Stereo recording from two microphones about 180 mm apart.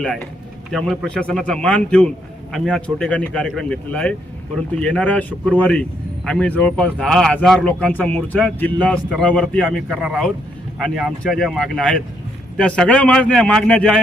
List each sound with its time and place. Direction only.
0.7 s a man's voice: centre (ahead or behind)